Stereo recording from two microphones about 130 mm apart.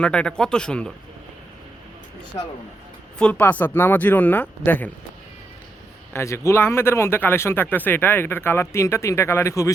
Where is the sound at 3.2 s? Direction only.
10° left (ahead or behind).